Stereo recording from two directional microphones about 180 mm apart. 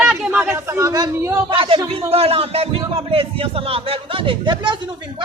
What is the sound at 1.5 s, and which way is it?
A man's voice, 30° right (ahead or behind).